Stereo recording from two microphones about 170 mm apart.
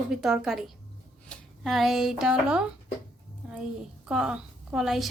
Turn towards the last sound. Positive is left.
turn(degrees=0)  # may be behind; listen again after turning